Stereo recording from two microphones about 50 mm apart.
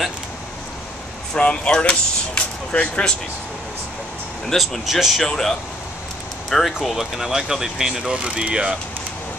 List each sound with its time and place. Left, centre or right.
1.3 s speech: left
4.6 s speech: centre
5.2 s speech: centre; by 8.7 s right